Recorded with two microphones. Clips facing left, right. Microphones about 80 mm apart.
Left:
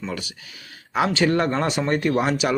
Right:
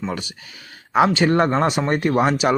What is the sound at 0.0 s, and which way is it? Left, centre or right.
Speech, right.